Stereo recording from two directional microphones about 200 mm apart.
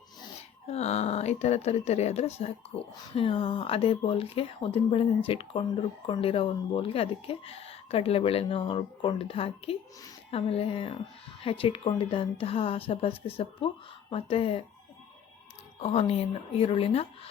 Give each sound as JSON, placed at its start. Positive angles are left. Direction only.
{"t": 0.7, "sound": "speech", "side_deg": 35}
{"t": 15.8, "sound": "speech", "side_deg": 30}